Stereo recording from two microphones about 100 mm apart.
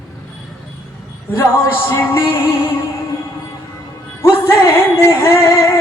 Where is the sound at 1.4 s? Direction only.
20° left (ahead or behind).